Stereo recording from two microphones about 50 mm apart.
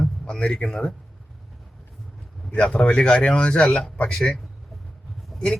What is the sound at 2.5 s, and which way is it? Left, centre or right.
Speech, left.